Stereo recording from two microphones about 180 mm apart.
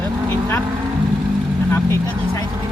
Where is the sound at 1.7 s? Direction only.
15° left (ahead or behind).